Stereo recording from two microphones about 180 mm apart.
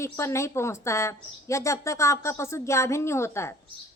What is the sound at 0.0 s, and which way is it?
Speech, 15° left (ahead or behind).